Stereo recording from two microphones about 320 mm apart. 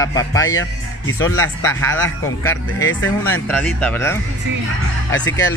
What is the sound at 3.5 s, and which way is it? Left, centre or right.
Speech, centre.